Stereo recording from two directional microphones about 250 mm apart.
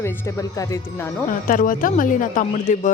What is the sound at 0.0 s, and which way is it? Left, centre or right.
Speech, centre.